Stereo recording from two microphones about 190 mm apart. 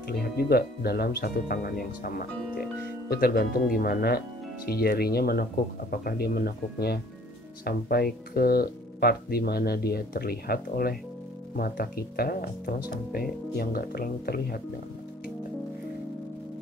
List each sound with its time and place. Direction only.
0.5 s speech: 55° left (ahead or behind)